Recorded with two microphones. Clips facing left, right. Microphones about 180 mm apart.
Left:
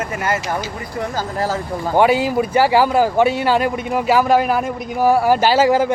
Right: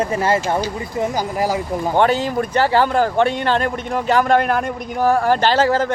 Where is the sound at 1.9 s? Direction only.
10° left (ahead or behind).